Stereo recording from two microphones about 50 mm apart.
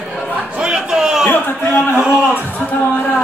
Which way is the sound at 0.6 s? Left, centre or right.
Centre.